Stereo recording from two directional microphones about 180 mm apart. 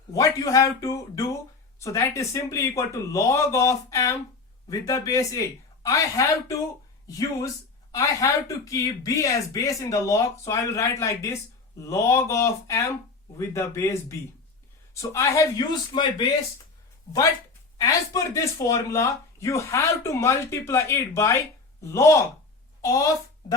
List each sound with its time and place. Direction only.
0.1 s speech: 20° left (ahead or behind)
17.7 s a woman's voice: 20° left (ahead or behind)